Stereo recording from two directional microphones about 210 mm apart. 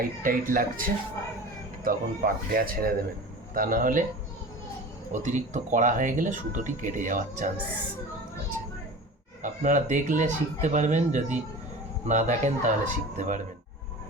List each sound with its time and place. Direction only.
0.2 s speech: 40° right (ahead or behind)
5.1 s speech: 35° right (ahead or behind)
9.4 s speech: 35° right (ahead or behind)